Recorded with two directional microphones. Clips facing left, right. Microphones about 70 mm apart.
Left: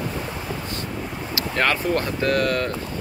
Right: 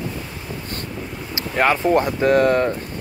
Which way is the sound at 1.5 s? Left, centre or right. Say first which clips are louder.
Right 5 dB; centre.